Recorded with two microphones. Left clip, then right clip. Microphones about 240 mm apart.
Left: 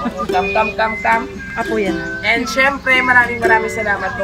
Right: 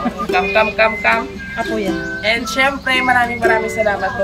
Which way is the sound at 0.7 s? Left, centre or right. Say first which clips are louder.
Right 1 dB; right.